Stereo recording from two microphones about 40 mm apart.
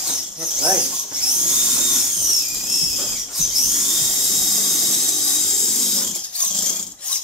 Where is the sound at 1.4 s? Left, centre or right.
Centre.